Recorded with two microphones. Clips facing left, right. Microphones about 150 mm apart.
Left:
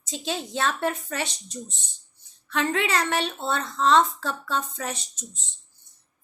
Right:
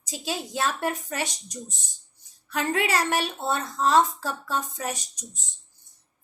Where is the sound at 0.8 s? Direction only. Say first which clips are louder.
Left 1 dB; 45° right (ahead or behind).